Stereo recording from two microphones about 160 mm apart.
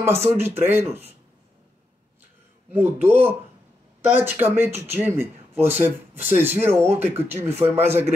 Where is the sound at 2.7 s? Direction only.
15° right (ahead or behind).